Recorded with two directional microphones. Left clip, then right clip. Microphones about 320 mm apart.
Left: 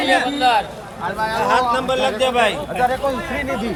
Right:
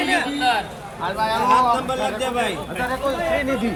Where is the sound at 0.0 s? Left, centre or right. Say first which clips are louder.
Left 4 dB; left.